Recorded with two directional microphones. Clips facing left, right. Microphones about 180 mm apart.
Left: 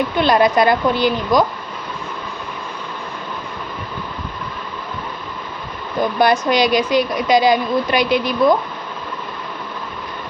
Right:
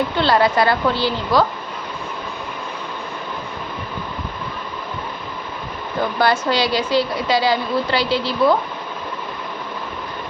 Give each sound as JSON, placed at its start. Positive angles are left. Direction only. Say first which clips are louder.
{"t": 0.2, "sound": "speech", "louder": "left 3 dB", "side_deg": 20}
{"t": 6.1, "sound": "speech", "louder": "left 3 dB", "side_deg": 15}